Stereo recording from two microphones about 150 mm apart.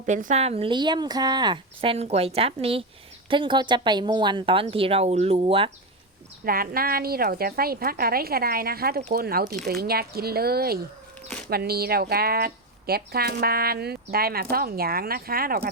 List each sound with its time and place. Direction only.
0.0 s speech: 55° right (ahead or behind); by 5.7 s 40° right (ahead or behind)
6.4 s speech: 75° right (ahead or behind)